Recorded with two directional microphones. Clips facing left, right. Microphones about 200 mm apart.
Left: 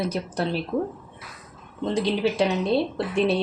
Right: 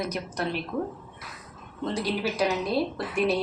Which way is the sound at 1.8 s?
25° left (ahead or behind).